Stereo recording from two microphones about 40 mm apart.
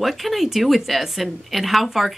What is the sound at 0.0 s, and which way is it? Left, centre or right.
A woman's voice, centre.